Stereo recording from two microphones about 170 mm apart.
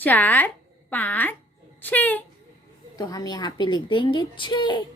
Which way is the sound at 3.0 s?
25° left (ahead or behind).